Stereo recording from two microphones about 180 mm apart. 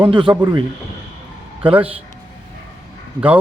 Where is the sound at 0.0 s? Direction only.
25° right (ahead or behind).